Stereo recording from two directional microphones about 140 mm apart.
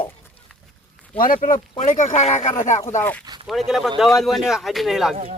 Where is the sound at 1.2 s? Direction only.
80° left.